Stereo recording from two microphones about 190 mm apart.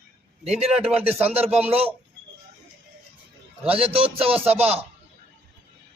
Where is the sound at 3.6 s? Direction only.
30° right (ahead or behind).